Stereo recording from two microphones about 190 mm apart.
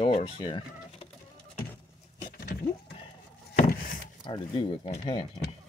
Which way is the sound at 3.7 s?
50° left (ahead or behind).